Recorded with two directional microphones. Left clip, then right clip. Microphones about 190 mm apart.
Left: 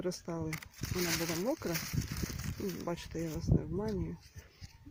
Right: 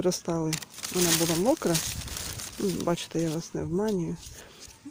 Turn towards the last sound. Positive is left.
turn(degrees=0)  # may be behind; listen again after turning